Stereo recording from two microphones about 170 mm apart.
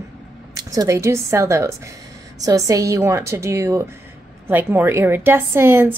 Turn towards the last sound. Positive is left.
turn(degrees=-15)  # may be behind; listen again after turning